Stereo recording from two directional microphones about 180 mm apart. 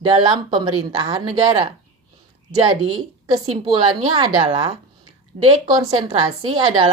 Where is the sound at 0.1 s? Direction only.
25° right (ahead or behind).